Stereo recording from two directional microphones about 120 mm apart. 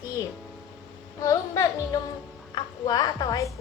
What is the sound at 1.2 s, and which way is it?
Music, 25° left (ahead or behind).